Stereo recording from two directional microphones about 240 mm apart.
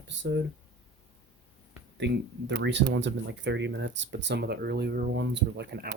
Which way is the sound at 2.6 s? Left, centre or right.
Right.